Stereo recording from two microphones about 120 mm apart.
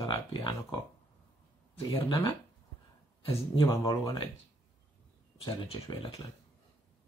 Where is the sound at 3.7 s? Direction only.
30° left (ahead or behind).